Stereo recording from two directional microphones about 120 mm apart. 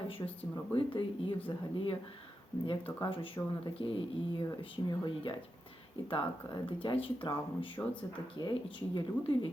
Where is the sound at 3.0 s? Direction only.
45° left (ahead or behind).